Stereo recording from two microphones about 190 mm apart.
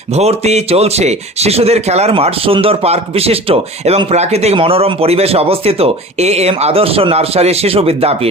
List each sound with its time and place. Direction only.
0.1 s speech: 35° right (ahead or behind)